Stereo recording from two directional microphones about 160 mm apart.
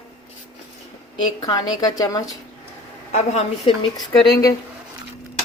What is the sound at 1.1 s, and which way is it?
A woman's voice, 25° left (ahead or behind).